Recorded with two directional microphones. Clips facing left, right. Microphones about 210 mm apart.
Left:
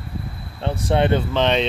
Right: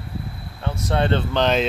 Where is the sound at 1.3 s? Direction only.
Centre (ahead or behind).